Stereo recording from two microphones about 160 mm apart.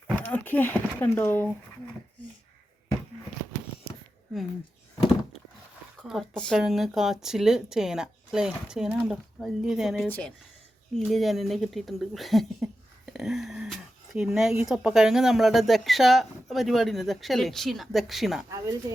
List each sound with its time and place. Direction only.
0.2 s speech: 10° left (ahead or behind)
6.0 s speech: centre (ahead or behind)
13.1 s a sound: centre (ahead or behind)
14.6 s speech: 5° right (ahead or behind)
18.5 s speech: 20° right (ahead or behind)